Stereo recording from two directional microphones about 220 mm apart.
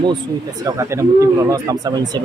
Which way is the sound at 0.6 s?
15° right (ahead or behind).